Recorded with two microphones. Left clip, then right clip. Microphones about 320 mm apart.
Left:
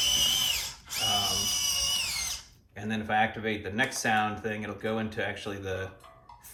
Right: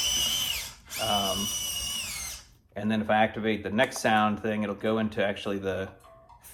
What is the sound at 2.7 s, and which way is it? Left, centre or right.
Speech, centre.